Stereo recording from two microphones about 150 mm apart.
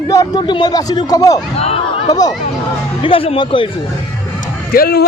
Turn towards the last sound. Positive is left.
turn(degrees=90)